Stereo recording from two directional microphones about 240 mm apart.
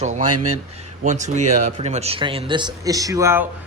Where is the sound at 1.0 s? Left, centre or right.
Right; by 3.4 s centre.